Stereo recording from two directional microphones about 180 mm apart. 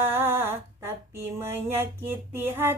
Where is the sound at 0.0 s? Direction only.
10° right (ahead or behind).